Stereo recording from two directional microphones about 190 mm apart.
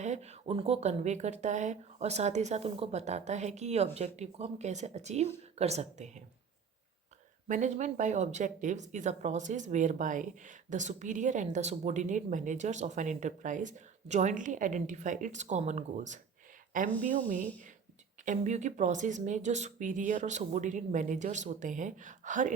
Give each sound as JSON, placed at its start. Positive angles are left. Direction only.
{"t": 0.0, "sound": "speech", "side_deg": -35}
{"t": 7.4, "sound": "speech", "side_deg": -40}
{"t": 18.3, "sound": "speech", "side_deg": -40}